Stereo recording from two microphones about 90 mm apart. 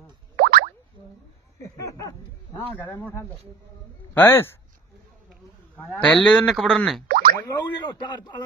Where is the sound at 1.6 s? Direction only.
40° left (ahead or behind).